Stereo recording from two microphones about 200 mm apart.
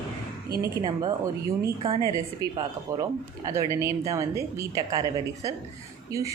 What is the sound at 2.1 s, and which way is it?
Speech, 20° right (ahead or behind).